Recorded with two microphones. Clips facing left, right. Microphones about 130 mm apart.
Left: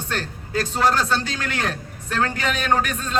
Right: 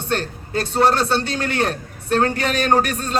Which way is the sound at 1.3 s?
35° right (ahead or behind).